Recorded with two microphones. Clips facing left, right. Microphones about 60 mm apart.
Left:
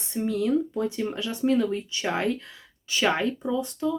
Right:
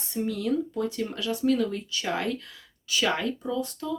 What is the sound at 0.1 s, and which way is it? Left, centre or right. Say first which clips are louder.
Speech: left 3 dB; left.